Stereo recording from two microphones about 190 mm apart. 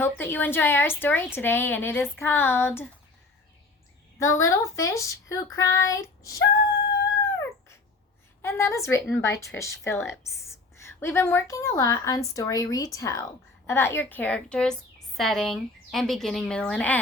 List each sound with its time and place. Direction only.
0.0 s a woman's voice: 10° left (ahead or behind)
4.2 s a woman's voice: 15° left (ahead or behind)
8.4 s a woman's voice: 15° left (ahead or behind)